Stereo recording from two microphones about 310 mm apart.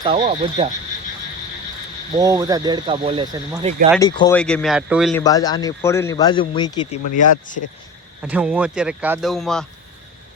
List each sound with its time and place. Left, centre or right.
0.0 s speech: centre
2.1 s speech: centre
4.0 s speech: centre
5.2 s a man's voice: centre
7.0 s speech: left
8.2 s speech: centre